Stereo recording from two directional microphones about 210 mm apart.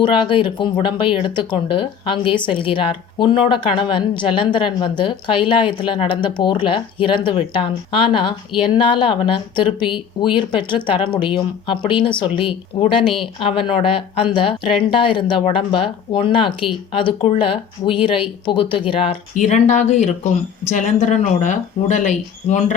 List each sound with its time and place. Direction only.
0.0 s speech: 25° left (ahead or behind)